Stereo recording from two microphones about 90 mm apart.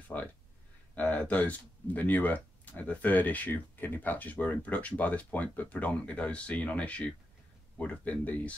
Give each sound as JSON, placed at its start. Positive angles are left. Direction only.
{"t": 0.9, "sound": "speech", "side_deg": 20}